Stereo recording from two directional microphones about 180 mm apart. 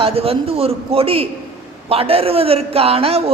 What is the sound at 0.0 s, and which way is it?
A man's voice, 35° right (ahead or behind).